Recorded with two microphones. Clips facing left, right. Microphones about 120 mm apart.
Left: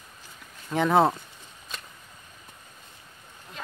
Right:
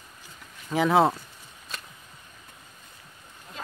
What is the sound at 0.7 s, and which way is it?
Speech, centre (ahead or behind).